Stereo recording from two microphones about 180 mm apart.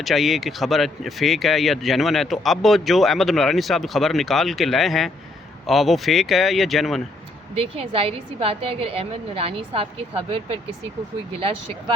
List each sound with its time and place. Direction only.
0.0 s speech: centre (ahead or behind)
7.5 s a woman's voice: 30° right (ahead or behind)